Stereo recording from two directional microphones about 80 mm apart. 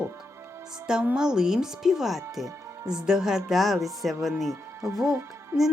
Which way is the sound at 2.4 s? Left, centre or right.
Right.